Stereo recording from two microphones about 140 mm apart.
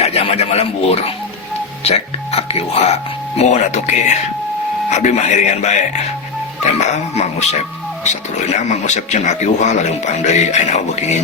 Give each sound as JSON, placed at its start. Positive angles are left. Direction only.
{"t": 0.0, "sound": "a man's voice", "side_deg": 50}